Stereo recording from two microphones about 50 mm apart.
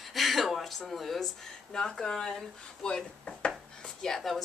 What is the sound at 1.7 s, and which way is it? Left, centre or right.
A woman's voice, centre.